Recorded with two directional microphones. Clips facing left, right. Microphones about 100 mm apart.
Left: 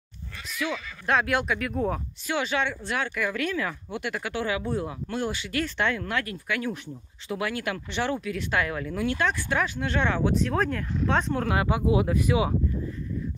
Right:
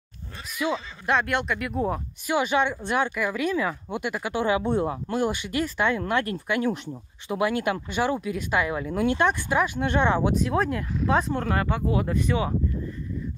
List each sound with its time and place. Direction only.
0.6 s speech: 25° right (ahead or behind)
1.0 s speech: centre (ahead or behind)
2.2 s speech: 15° right (ahead or behind)
5.1 s speech: 15° right (ahead or behind)
11.4 s speech: 10° left (ahead or behind)